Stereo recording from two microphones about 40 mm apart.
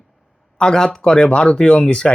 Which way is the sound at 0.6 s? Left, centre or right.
Left.